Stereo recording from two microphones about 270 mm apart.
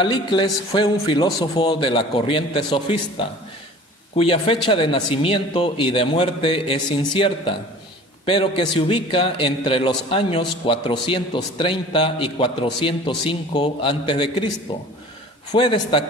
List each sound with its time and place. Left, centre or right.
0.0 s a man's voice: centre